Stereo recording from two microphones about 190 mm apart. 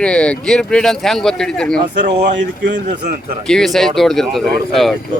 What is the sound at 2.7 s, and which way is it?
Speech, 40° right (ahead or behind).